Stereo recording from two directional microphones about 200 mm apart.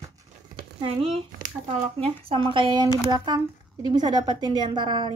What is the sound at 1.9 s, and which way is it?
A woman's voice, 30° right (ahead or behind).